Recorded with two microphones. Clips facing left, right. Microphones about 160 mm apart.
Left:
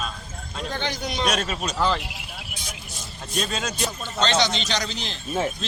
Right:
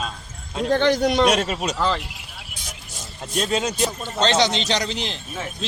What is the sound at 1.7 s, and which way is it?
Speech, 5° left (ahead or behind).